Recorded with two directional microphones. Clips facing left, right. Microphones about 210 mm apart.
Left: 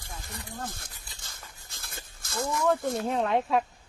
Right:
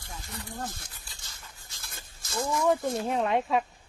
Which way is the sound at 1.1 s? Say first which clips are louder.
Left 2 dB; 50° left (ahead or behind).